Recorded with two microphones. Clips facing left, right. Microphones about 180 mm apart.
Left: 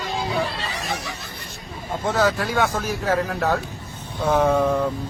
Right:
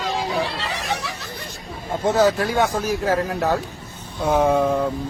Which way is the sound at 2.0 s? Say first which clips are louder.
Right 4 dB; 15° right (ahead or behind).